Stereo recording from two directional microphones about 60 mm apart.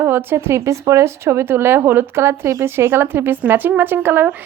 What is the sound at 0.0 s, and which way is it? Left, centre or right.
A woman's voice, right.